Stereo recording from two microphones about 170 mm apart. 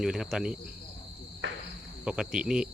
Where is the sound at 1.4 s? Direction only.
90° right.